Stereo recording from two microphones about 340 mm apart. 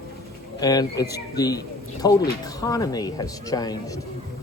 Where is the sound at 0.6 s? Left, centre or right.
Centre.